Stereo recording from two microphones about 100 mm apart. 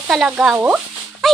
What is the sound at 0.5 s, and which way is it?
Speech, 20° right (ahead or behind).